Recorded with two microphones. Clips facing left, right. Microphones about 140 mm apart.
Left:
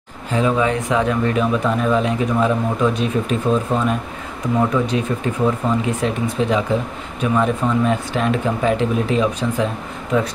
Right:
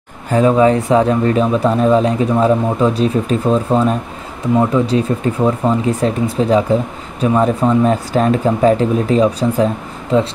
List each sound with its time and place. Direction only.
0.3 s speech: 40° right (ahead or behind)